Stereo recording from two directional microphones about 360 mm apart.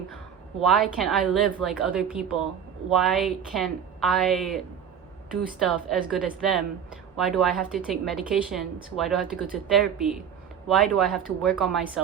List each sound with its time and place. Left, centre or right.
0.6 s a woman's voice: centre